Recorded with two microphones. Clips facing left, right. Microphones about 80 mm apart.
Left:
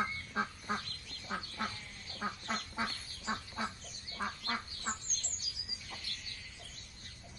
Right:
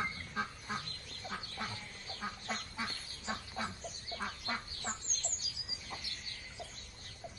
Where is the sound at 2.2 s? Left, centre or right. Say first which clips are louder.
Left 3 dB; left.